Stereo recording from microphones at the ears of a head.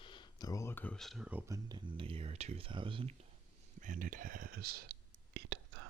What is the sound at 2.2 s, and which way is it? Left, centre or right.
Speech, right.